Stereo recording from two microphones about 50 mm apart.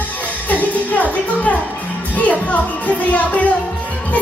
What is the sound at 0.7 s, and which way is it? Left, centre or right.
Music, left.